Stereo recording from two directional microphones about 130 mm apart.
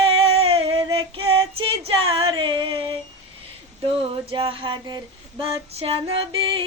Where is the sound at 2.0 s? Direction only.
45° right (ahead or behind).